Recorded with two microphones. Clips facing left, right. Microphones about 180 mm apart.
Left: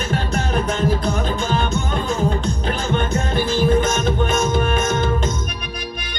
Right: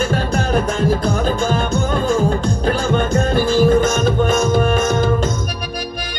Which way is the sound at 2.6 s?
35° right (ahead or behind).